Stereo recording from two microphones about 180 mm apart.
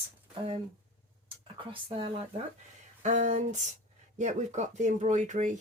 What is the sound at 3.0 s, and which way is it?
Speech, 45° right (ahead or behind).